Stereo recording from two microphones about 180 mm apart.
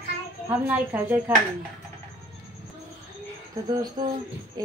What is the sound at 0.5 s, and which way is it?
Speech, 10° right (ahead or behind).